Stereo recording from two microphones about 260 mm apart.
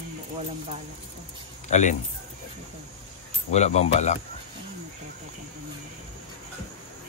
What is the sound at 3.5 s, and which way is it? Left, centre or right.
Speech, left.